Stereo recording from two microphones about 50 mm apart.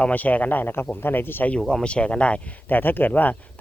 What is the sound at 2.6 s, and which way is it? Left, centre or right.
Speech, left.